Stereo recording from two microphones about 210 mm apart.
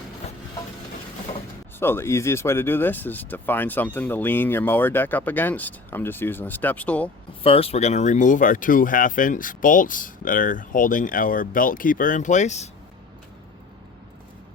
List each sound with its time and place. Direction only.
0.2 s a sound: 30° left (ahead or behind)
1.8 s speech: 10° left (ahead or behind)
7.4 s speech: 25° left (ahead or behind)